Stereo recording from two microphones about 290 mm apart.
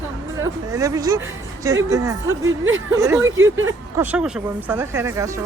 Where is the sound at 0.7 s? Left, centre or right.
Centre.